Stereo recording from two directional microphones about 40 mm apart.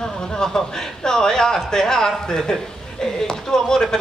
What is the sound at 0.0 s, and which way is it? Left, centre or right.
A woman's voice, centre.